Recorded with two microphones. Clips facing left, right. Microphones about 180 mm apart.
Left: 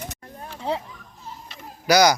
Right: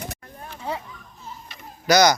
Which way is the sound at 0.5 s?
30° left (ahead or behind).